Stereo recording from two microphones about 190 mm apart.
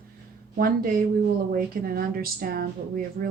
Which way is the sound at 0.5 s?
50° right (ahead or behind).